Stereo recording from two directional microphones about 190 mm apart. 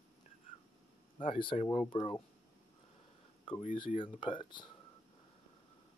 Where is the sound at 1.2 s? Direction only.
25° left (ahead or behind).